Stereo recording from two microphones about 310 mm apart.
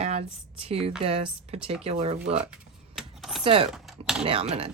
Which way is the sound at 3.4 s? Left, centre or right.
Centre.